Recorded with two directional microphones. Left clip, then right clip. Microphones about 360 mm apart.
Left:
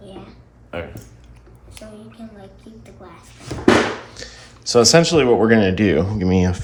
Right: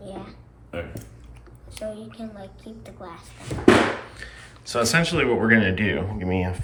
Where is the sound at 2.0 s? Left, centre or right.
Centre.